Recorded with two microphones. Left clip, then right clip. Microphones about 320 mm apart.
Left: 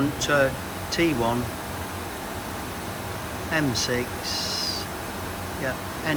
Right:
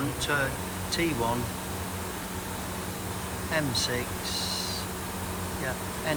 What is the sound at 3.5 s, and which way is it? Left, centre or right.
Speech, centre.